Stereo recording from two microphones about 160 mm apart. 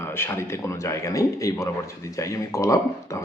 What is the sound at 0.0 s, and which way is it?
Speech, 15° left (ahead or behind).